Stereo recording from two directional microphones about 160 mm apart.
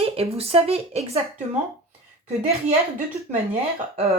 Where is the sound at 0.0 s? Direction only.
40° right (ahead or behind).